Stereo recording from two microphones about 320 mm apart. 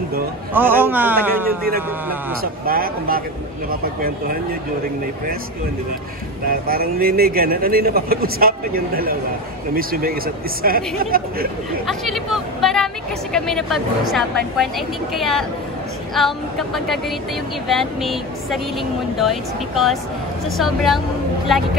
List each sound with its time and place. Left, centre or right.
0.5 s speech: centre
2.4 s a man's voice: right
6.4 s a man's voice: right
11.8 s speech: centre